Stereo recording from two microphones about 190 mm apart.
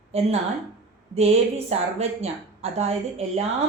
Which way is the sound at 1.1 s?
35° right (ahead or behind).